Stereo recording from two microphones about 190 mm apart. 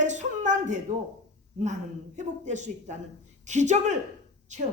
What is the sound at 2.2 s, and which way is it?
A woman's voice, 40° right (ahead or behind).